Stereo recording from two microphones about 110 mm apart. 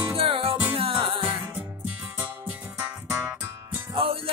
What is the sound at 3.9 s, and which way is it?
Music, 55° right (ahead or behind).